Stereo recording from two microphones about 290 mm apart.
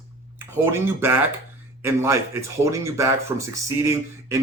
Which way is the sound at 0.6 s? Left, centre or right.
Centre.